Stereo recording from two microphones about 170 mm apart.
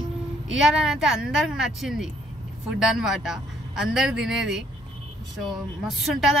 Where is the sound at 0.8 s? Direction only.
5° right (ahead or behind).